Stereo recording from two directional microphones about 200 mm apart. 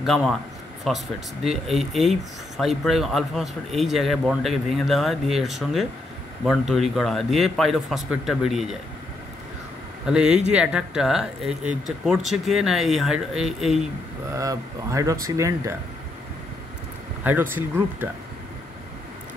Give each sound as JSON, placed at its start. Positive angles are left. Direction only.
{"t": 0.0, "sound": "speech", "side_deg": 0}
{"t": 10.0, "sound": "speech", "side_deg": -5}
{"t": 14.3, "sound": "speech", "side_deg": -15}
{"t": 17.2, "sound": "speech", "side_deg": -10}